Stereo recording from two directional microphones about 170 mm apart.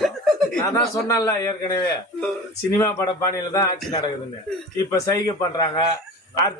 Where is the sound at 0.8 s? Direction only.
20° left (ahead or behind).